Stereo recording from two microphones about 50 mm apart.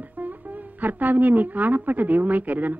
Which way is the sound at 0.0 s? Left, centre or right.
Right.